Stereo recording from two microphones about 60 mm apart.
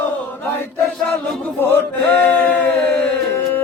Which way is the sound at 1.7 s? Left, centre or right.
Left.